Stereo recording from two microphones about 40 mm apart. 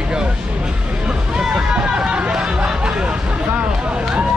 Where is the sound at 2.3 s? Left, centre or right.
Right.